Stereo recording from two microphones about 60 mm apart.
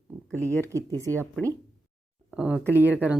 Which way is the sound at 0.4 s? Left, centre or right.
Right.